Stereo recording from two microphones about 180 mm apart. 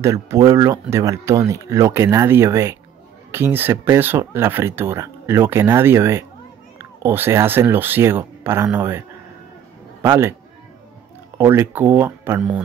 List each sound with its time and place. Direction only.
0.0 s speech: 20° right (ahead or behind)
10.0 s speech: 15° right (ahead or behind)
11.3 s speech: 15° right (ahead or behind)